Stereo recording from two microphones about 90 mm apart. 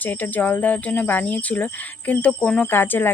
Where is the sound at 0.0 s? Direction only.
20° left (ahead or behind).